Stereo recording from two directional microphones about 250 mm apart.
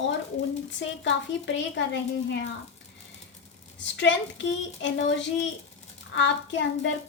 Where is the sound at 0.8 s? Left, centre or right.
Left.